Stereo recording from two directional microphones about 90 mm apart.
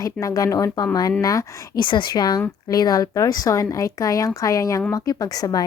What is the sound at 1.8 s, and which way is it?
A woman's voice, 60° left (ahead or behind).